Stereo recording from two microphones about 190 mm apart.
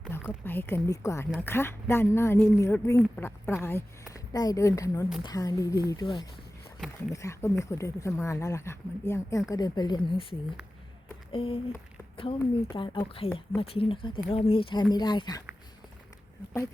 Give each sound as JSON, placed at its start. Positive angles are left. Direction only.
{"t": 0.1, "sound": "speech", "side_deg": 10}